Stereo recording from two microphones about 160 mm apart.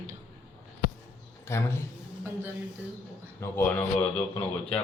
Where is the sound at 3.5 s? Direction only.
10° left (ahead or behind).